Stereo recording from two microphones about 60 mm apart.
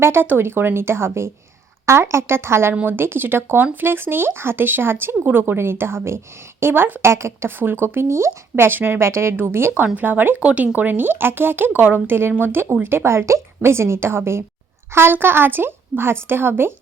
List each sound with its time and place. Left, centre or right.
0.0 s speech: right
7.0 s speech: right
9.3 s speech: right
9.6 s speech: right
9.8 s speech: right